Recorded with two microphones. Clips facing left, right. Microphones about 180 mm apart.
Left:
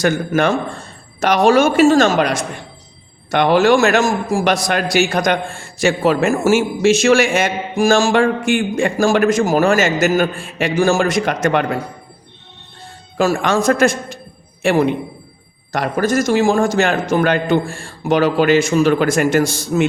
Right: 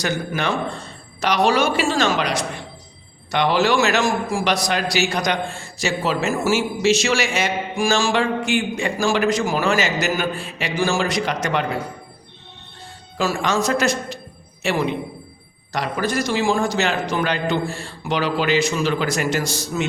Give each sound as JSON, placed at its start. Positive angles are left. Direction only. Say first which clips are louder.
{"t": 0.0, "sound": "a man's voice", "louder": "left 8 dB", "side_deg": 50}
{"t": 13.1, "sound": "a man's voice", "louder": "left 5 dB", "side_deg": 50}